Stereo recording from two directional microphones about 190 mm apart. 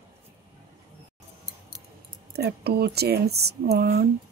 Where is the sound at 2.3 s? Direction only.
55° right (ahead or behind).